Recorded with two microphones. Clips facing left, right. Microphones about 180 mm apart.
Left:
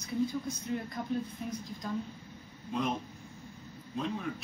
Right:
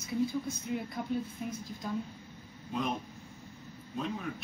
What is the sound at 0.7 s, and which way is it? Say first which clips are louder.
Speech: right 1 dB; 5° right (ahead or behind).